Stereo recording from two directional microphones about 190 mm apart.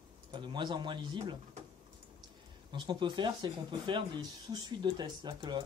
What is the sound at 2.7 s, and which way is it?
Speech, 25° right (ahead or behind).